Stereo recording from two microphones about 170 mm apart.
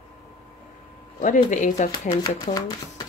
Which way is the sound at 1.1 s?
50° left (ahead or behind).